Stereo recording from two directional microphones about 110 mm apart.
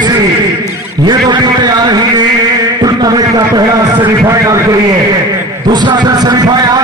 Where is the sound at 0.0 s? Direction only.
40° right (ahead or behind).